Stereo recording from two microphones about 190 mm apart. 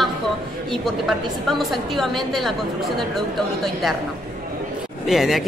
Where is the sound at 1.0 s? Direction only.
Centre (ahead or behind).